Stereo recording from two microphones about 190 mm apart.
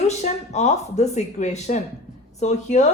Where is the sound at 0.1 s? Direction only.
35° left (ahead or behind).